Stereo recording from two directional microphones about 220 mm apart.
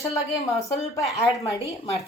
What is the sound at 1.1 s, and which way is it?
Speech, 15° left (ahead or behind).